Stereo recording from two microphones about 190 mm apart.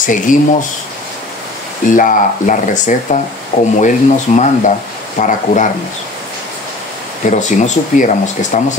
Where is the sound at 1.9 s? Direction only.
45° left (ahead or behind).